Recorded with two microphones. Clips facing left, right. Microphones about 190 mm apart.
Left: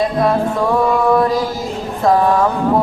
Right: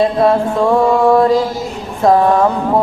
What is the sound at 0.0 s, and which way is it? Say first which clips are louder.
Music: right 3 dB; 25° right (ahead or behind).